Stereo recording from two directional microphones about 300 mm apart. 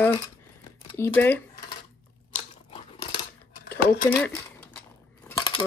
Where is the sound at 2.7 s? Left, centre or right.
Centre.